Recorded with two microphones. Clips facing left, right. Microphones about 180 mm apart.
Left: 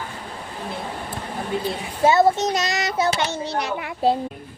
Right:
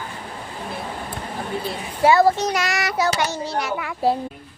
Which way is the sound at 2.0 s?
25° left (ahead or behind).